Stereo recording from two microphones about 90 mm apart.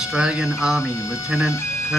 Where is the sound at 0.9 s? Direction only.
35° left (ahead or behind).